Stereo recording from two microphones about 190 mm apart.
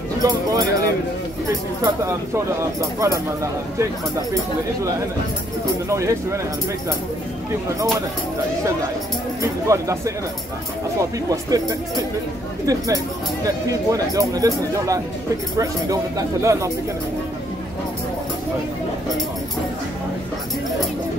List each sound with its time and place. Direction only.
0.2 s speech: 20° right (ahead or behind)
1.8 s speech: 15° right (ahead or behind)
5.9 s speech: 15° right (ahead or behind)
9.4 s speech: 15° right (ahead or behind)
12.6 s speech: 20° right (ahead or behind)